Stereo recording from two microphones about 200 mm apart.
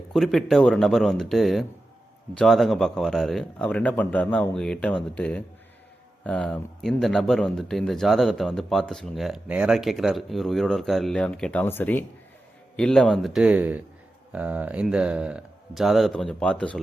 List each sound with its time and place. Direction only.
0.1 s speech: centre (ahead or behind)